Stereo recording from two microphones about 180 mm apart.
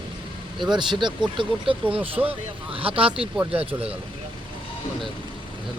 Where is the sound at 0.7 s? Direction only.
25° right (ahead or behind).